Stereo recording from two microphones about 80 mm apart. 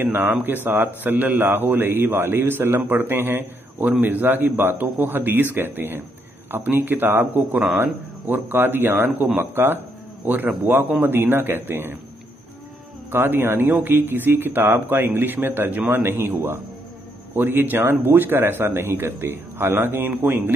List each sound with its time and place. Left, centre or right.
0.0 s a man's voice: right
13.1 s a man's voice: right